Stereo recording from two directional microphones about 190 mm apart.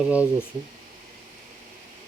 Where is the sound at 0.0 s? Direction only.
5° right (ahead or behind).